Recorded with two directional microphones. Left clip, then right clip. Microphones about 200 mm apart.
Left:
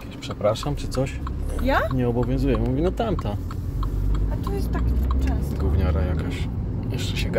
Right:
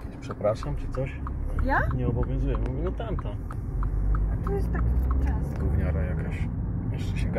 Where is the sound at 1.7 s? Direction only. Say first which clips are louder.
Left 5 dB; 40° left (ahead or behind).